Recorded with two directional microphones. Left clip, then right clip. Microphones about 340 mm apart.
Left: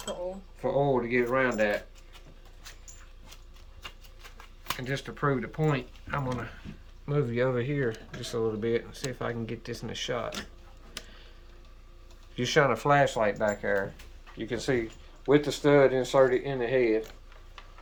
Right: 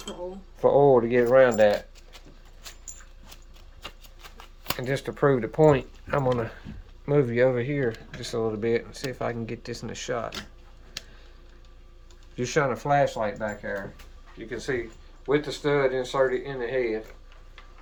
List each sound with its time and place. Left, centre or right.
0.6 s speech: centre
2.6 s dog: right
3.8 s speech: right
7.0 s speech: centre
12.4 s speech: centre
14.5 s speech: left